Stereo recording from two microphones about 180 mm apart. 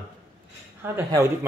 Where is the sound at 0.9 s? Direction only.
15° right (ahead or behind).